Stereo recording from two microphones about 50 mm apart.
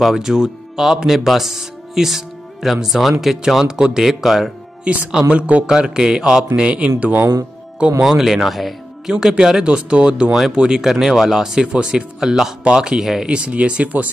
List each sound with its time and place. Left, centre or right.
0.0 s speech: centre
3.6 s speech: centre
4.8 s a man's voice: right
5.7 s speech: centre
8.0 s speech: centre
9.1 s speech: centre
13.3 s a man's voice: right